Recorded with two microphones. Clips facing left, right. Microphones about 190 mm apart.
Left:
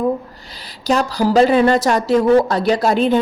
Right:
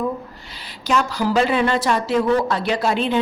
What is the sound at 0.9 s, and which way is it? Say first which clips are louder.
Speech: left 4 dB; 35° left (ahead or behind).